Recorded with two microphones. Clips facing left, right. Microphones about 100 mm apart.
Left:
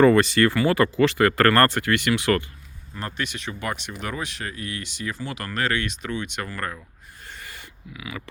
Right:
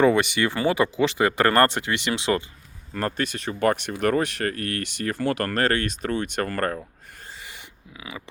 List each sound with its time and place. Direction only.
0.0 s speech: 15° right (ahead or behind)
2.9 s speech: 45° right (ahead or behind)
7.4 s a sound: 15° right (ahead or behind)
7.9 s speech: 25° right (ahead or behind)